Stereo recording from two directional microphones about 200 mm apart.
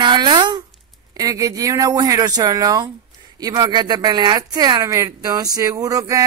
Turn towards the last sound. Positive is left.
turn(degrees=-15)  # may be behind; listen again after turning